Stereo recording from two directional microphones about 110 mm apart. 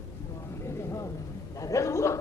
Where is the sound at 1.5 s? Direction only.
30° left (ahead or behind).